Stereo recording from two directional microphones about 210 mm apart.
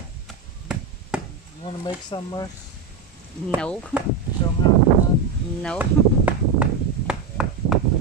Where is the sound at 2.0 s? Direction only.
20° left (ahead or behind).